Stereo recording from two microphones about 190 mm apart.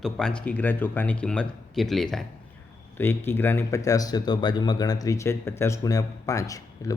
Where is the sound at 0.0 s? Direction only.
5° left (ahead or behind).